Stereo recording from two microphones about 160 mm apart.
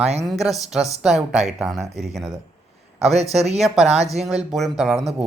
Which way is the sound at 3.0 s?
40° right (ahead or behind).